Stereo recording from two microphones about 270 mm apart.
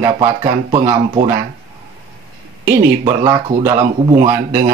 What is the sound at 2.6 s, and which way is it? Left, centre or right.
Speech, centre.